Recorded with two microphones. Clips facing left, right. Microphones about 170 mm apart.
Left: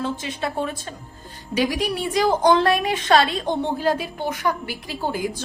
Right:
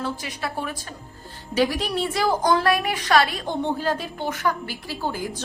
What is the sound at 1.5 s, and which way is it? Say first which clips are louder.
Speech: even; 15° left (ahead or behind).